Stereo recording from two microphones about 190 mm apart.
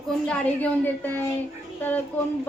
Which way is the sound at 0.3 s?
10° left (ahead or behind).